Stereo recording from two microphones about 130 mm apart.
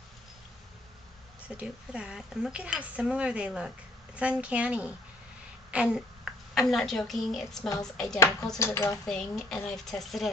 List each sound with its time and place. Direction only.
1.6 s speech: 5° right (ahead or behind)
8.5 s speech: 20° left (ahead or behind)
9.0 s speech: 5° left (ahead or behind)